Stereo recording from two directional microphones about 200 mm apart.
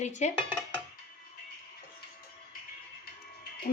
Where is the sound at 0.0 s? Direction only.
35° left (ahead or behind).